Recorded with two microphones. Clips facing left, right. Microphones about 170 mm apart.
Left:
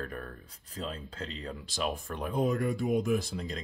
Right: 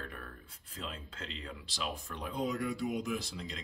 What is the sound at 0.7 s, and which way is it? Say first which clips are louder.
Speech: left 6 dB; 35° left (ahead or behind).